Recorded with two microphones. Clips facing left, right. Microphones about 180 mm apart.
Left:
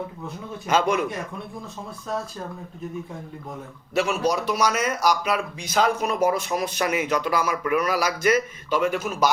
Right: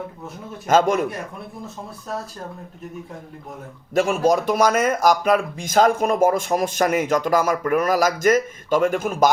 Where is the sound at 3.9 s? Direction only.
50° right (ahead or behind).